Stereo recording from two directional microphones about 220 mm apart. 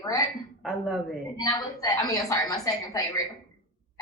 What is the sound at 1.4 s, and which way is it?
A woman's voice, 15° left (ahead or behind).